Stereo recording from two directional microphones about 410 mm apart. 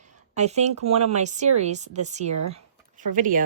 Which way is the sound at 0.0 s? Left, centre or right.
Centre.